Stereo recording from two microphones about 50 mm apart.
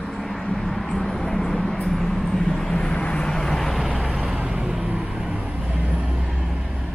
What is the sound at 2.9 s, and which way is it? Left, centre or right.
Vehicle, left.